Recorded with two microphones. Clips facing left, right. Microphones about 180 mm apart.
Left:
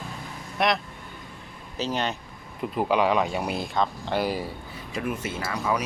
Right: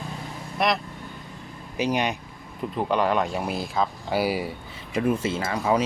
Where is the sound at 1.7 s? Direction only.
15° right (ahead or behind).